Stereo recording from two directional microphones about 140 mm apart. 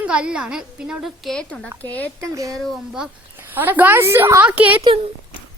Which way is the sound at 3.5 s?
15° right (ahead or behind).